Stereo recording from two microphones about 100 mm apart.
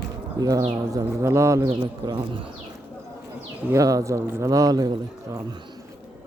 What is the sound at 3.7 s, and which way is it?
Speech, 35° right (ahead or behind).